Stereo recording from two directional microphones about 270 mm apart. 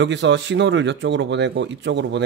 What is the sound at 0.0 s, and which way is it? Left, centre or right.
Speech, right.